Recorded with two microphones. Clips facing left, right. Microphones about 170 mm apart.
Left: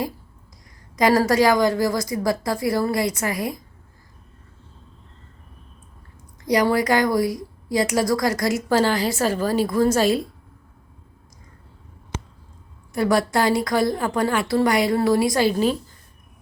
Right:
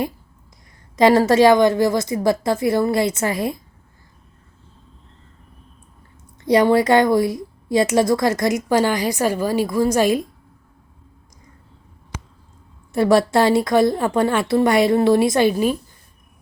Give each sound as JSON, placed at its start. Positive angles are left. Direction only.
{"t": 0.9, "sound": "a woman's voice", "side_deg": -25}
{"t": 6.4, "sound": "a woman's voice", "side_deg": -25}
{"t": 12.9, "sound": "a woman's voice", "side_deg": -25}
{"t": 15.5, "sound": "a woman's voice", "side_deg": -10}